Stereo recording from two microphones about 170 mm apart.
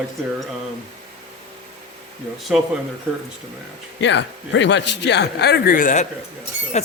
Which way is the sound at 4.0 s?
90° left.